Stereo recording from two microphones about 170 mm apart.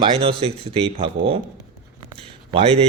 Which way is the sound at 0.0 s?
35° right (ahead or behind).